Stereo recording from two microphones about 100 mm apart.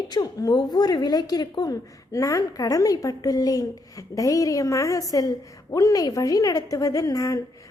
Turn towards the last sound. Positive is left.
turn(degrees=35)  # may be behind; listen again after turning